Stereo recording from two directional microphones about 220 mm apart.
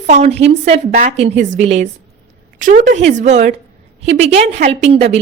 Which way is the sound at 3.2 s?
35° right (ahead or behind).